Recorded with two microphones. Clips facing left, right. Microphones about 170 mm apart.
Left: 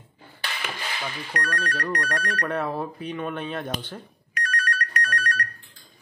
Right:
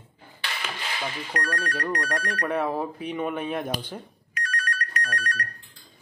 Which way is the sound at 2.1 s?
25° right (ahead or behind).